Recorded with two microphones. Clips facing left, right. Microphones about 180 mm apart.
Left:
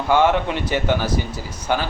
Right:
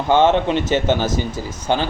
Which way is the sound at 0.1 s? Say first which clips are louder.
Right 3 dB; 25° right (ahead or behind).